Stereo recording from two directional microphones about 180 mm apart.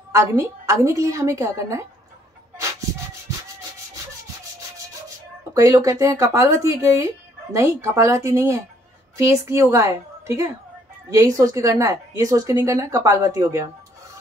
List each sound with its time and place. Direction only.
0.1 s a woman's voice: 15° right (ahead or behind)
2.6 s a sound: 15° right (ahead or behind)
5.5 s a woman's voice: 20° right (ahead or behind)